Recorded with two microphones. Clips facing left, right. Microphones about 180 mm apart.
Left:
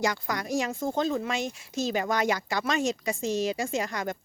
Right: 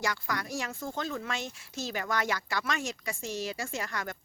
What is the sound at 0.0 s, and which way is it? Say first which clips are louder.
Speech: left 5 dB; 20° left (ahead or behind).